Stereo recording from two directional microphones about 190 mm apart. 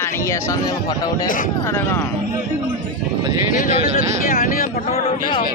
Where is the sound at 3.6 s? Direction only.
50° left (ahead or behind).